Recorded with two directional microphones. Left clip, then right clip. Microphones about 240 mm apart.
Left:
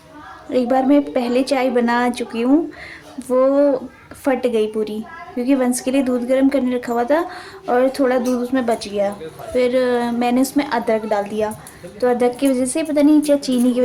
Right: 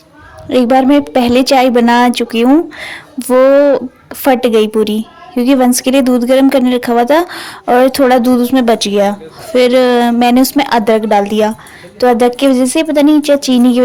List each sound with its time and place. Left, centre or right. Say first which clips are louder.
0.5 s speech: right 7 dB; right